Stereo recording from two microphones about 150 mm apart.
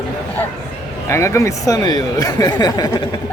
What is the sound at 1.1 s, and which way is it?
Speech, 20° left (ahead or behind).